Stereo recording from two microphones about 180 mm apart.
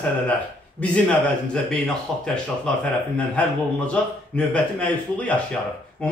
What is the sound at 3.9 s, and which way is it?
A man's voice, 5° left (ahead or behind).